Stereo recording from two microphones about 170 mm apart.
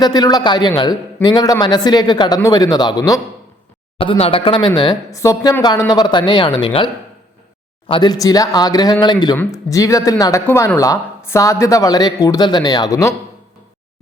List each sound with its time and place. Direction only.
0.0 s speech: 25° left (ahead or behind)
3.9 s speech: 35° left (ahead or behind)